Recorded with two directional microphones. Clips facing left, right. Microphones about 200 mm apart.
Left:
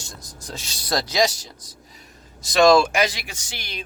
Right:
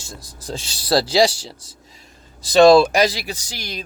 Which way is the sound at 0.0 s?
30° right (ahead or behind).